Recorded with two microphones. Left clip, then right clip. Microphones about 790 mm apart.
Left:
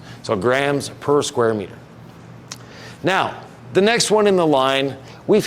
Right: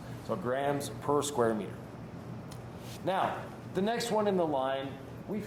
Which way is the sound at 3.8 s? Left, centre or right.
Left.